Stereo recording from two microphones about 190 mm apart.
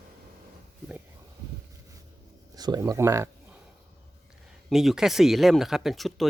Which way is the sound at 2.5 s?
20° right (ahead or behind).